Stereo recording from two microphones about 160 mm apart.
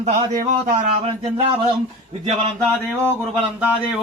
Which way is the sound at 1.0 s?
35° right (ahead or behind).